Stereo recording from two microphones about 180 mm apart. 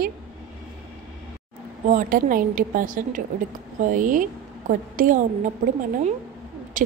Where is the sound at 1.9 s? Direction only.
45° right (ahead or behind).